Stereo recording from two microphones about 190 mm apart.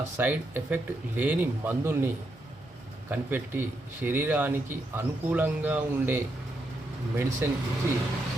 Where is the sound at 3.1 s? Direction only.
10° right (ahead or behind).